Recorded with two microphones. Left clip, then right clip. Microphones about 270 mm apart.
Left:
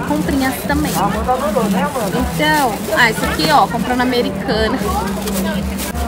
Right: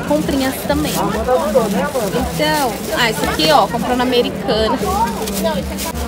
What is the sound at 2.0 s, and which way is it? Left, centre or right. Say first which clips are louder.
A woman's voice: even; centre.